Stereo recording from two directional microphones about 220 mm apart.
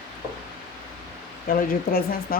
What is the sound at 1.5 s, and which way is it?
Speech, 40° left (ahead or behind).